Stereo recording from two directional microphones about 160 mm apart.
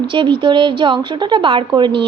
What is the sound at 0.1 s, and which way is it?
A woman's voice, 30° right (ahead or behind).